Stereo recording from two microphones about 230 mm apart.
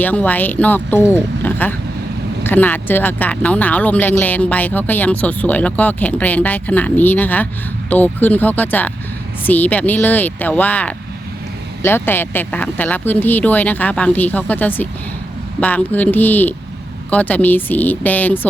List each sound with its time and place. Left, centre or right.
0.0 s speech: centre